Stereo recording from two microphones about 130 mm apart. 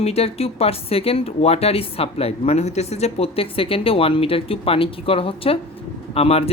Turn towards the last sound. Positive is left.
turn(degrees=50)  # may be behind; listen again after turning